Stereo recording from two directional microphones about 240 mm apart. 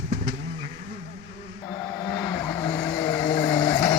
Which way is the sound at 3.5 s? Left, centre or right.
Centre.